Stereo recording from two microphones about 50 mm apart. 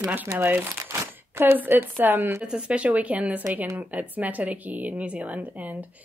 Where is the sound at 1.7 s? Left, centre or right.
Right.